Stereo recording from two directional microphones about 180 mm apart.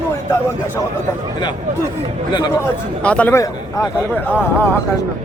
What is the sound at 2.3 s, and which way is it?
A man's voice, 20° left (ahead or behind).